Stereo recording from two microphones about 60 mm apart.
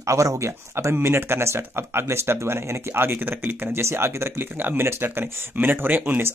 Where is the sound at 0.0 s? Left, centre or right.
Right.